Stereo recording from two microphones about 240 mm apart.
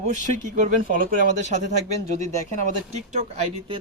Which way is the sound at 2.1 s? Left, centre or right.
Right.